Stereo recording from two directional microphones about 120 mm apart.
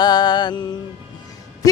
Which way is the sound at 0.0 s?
35° left (ahead or behind).